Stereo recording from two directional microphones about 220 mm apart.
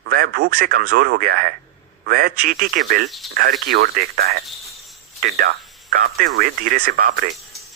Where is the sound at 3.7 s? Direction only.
45° right (ahead or behind).